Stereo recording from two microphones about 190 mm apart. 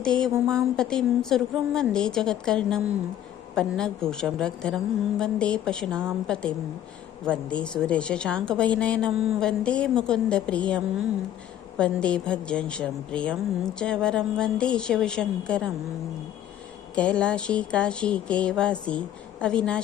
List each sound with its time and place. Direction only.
0.0 s a woman's voice: 5° left (ahead or behind)
11.8 s a woman's voice: 5° left (ahead or behind)
16.9 s a woman's voice: 5° left (ahead or behind)